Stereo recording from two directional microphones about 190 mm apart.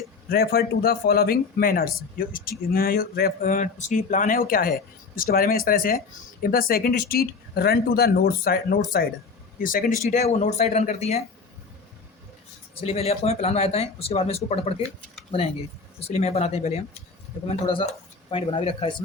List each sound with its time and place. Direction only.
0.3 s speech: 55° left (ahead or behind)
10.1 s speech: 40° left (ahead or behind)
12.8 s speech: 35° left (ahead or behind)
16.0 s speech: 35° left (ahead or behind)